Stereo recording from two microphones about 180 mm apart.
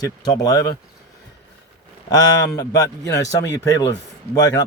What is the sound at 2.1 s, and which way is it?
Speech, 20° left (ahead or behind).